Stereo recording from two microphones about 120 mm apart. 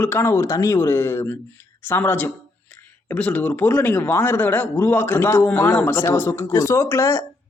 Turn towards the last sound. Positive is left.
turn(degrees=25)  # may be behind; listen again after turning